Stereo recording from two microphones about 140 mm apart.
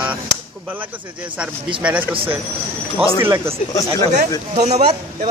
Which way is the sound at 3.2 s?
20° right (ahead or behind).